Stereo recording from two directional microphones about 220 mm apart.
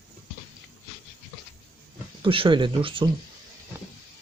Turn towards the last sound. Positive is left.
turn(degrees=-25)  # may be behind; listen again after turning